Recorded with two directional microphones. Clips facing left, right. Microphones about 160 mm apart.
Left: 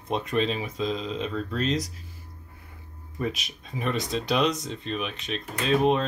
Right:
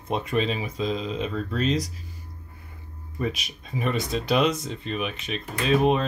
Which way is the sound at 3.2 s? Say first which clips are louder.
Right 1 dB; centre (ahead or behind).